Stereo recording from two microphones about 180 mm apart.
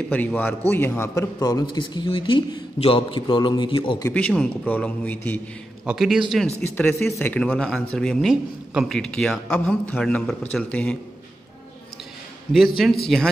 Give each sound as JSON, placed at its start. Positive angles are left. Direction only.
{"t": 0.1, "sound": "a man's voice", "side_deg": 10}
{"t": 4.1, "sound": "a man's voice", "side_deg": 5}
{"t": 5.9, "sound": "speech", "side_deg": -5}
{"t": 12.5, "sound": "speech", "side_deg": 0}